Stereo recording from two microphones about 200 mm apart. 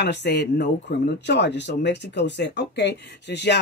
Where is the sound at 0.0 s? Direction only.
55° left (ahead or behind).